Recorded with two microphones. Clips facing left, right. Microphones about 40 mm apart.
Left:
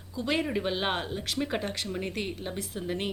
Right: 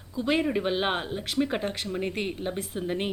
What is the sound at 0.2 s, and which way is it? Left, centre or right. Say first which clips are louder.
A woman's voice: right 3 dB; centre.